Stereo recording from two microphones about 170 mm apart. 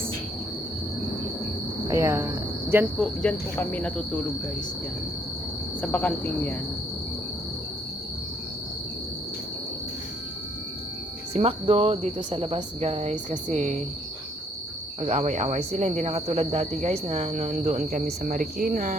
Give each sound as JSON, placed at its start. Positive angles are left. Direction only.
{"t": 1.9, "sound": "cricket", "side_deg": -15}
{"t": 3.0, "sound": "speech", "side_deg": 5}
{"t": 5.8, "sound": "speech", "side_deg": 10}
{"t": 11.3, "sound": "speech", "side_deg": -35}
{"t": 15.0, "sound": "speech", "side_deg": -40}